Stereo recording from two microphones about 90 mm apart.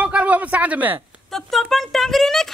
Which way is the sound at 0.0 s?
15° right (ahead or behind).